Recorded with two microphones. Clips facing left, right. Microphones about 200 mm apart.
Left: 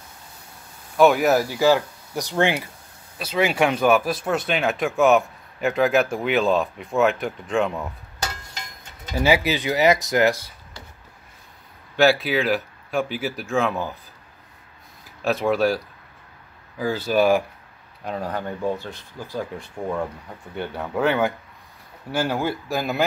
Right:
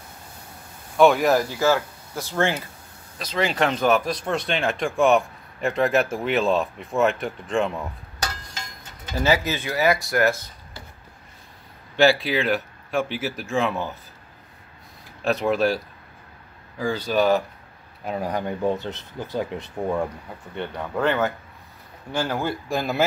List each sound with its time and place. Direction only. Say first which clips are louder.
0.9 s speech: even; 5° left (ahead or behind)
1.6 s speech: left 3 dB; 15° left (ahead or behind); by 7.8 s centre (ahead or behind)
9.1 s speech: left 2 dB; 10° left (ahead or behind)
12.0 s speech: even; centre (ahead or behind)
15.2 s speech: left 1 dB; centre (ahead or behind)
18.0 s speech: right 1 dB; 10° right (ahead or behind)
20.5 s speech: left 1 dB; 5° left (ahead or behind)